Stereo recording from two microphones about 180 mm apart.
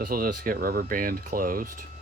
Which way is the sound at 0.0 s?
55° right (ahead or behind).